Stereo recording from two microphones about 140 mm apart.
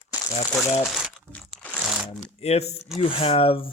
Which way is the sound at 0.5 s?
5° right (ahead or behind).